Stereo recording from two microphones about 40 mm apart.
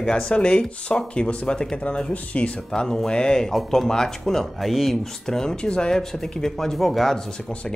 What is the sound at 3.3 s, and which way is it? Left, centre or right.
Speech, centre.